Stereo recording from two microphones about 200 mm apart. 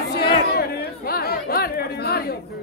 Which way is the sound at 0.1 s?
50° left (ahead or behind).